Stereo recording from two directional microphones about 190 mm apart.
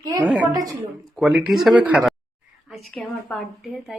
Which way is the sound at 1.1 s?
Centre (ahead or behind).